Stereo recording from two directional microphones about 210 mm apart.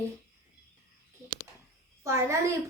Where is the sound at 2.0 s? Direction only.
15° right (ahead or behind).